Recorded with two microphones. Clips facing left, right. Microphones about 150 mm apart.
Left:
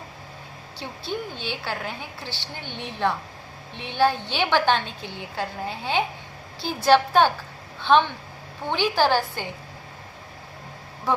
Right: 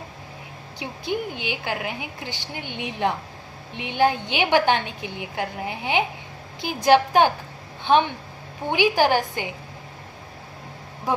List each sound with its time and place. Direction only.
0.8 s a woman's voice: 15° right (ahead or behind)